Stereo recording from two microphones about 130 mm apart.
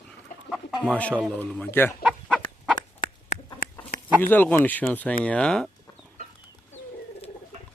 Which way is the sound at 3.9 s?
90° left.